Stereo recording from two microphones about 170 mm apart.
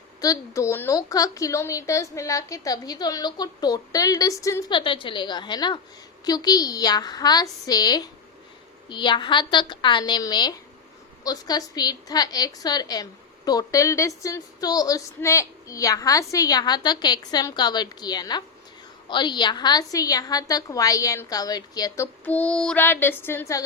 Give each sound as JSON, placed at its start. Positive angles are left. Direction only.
{"t": 0.2, "sound": "a woman's voice", "side_deg": 20}